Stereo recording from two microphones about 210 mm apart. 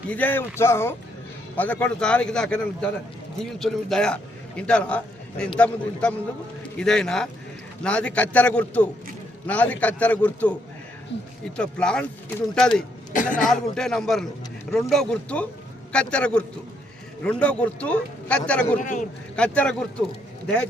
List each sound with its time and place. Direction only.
0.1 s a man's voice: 10° left (ahead or behind)
11.1 s speech: 55° left (ahead or behind)
11.5 s a man's voice: 5° left (ahead or behind)
13.1 s a man's voice: 40° left (ahead or behind)
13.5 s a man's voice: centre (ahead or behind)
18.8 s a man's voice: 35° left (ahead or behind)
19.4 s a man's voice: 5° left (ahead or behind)